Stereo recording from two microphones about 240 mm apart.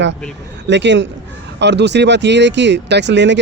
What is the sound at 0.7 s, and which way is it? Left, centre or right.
Speech, right.